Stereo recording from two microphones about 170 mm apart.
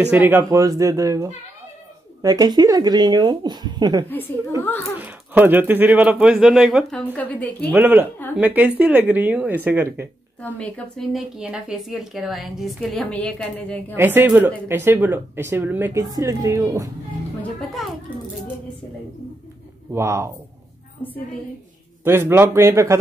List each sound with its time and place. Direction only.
0.1 s speech: 10° right (ahead or behind)
4.9 s a woman's voice: 10° right (ahead or behind); by 7.7 s 10° left (ahead or behind)
7.7 s speech: 10° right (ahead or behind)
10.4 s speech: 5° left (ahead or behind)
13.9 s speech: 10° right (ahead or behind)
17.4 s speech: centre (ahead or behind)
19.9 s speech: 15° right (ahead or behind)
22.0 s speech: 15° right (ahead or behind)